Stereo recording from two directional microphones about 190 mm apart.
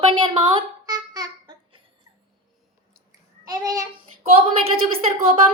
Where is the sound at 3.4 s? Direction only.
20° right (ahead or behind).